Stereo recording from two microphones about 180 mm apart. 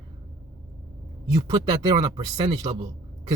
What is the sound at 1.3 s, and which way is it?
Speech, 20° right (ahead or behind).